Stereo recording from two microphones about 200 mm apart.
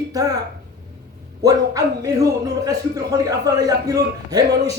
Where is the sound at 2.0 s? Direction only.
20° right (ahead or behind).